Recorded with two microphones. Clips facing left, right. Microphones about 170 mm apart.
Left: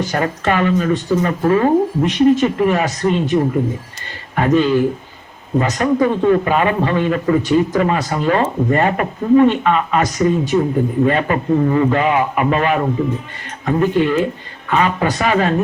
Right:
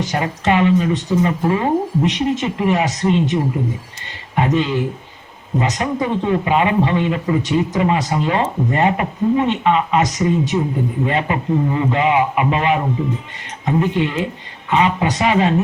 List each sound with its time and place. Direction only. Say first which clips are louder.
0.0 s a man's voice: left 1 dB; 20° right (ahead or behind)
4.4 s a man's voice: left 4 dB; 20° right (ahead or behind)